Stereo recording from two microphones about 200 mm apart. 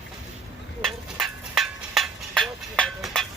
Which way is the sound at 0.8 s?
Centre (ahead or behind).